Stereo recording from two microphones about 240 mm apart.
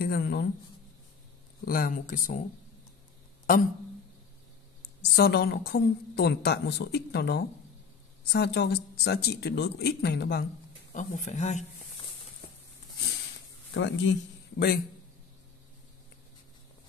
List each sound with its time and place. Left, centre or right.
0.0 s a sound: left
1.7 s speech: left
5.0 s a woman's voice: left
10.9 s speech: left
13.7 s a woman's voice: left